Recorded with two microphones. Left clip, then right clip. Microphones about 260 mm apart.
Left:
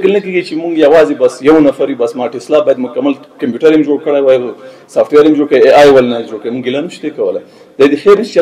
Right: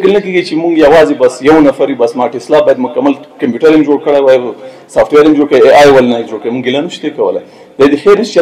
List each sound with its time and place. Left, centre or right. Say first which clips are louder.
0.0 s a man's voice: right 2 dB; left